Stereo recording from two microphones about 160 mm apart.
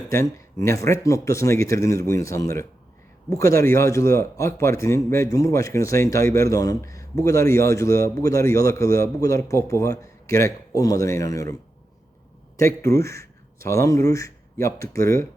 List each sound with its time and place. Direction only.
0.1 s a man's voice: 20° left (ahead or behind)
12.5 s speech: 15° left (ahead or behind)